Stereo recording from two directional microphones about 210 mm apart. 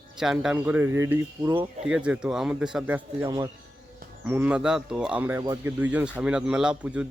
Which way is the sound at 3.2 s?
20° right (ahead or behind).